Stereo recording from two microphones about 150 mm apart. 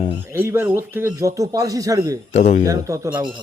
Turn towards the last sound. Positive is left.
turn(degrees=-20)  # may be behind; listen again after turning